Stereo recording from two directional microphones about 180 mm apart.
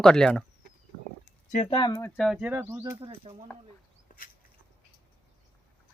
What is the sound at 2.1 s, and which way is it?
Speech, centre (ahead or behind).